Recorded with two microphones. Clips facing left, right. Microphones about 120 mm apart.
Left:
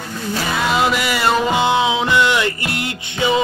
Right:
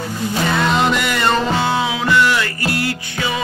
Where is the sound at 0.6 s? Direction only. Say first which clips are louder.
Even; 5° left (ahead or behind).